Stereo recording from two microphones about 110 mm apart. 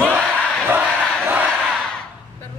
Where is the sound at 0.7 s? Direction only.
15° right (ahead or behind).